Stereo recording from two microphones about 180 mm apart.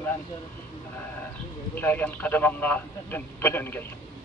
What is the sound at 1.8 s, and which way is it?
Speech, 10° left (ahead or behind).